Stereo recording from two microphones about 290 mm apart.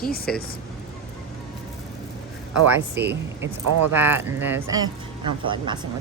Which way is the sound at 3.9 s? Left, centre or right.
Centre.